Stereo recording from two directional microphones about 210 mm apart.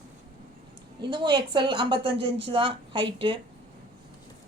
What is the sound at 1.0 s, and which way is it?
A woman's voice, 20° right (ahead or behind).